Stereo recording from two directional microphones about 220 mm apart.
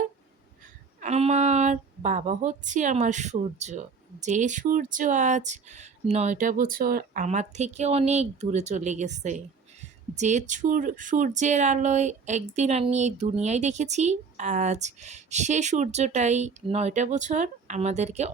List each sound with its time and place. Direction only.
0.9 s speech: 30° right (ahead or behind)